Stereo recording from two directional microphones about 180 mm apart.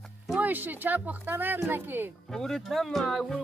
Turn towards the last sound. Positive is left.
turn(degrees=0)  # may be behind; listen again after turning